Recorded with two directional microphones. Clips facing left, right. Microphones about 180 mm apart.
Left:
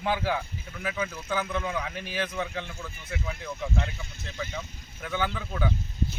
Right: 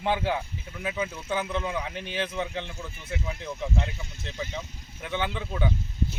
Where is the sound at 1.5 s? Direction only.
30° right (ahead or behind).